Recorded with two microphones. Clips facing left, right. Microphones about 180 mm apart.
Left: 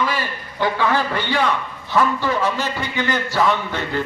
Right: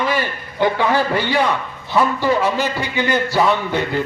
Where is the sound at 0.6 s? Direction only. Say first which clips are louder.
Right 3 dB; 15° right (ahead or behind).